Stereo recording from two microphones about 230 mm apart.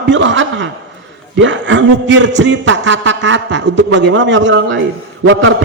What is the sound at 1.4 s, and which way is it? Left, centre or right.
Speech, right.